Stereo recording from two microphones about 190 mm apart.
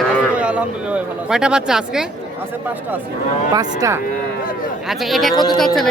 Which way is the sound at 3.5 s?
15° right (ahead or behind).